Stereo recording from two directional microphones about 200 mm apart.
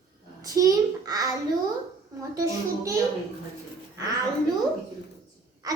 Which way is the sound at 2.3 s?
15° right (ahead or behind).